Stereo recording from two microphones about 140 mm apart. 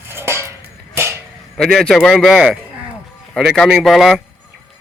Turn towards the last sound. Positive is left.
turn(degrees=0)  # may be behind; listen again after turning